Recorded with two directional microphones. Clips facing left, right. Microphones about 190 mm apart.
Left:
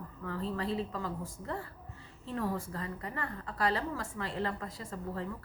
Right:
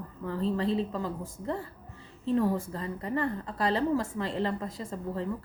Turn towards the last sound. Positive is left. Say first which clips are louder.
# right 5 dB
turn(degrees=-20)  # may be behind; listen again after turning